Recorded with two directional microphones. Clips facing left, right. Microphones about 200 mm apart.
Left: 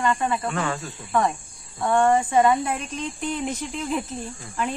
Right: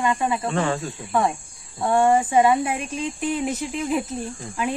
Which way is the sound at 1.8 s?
10° right (ahead or behind).